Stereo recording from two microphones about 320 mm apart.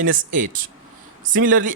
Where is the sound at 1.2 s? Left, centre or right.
Right.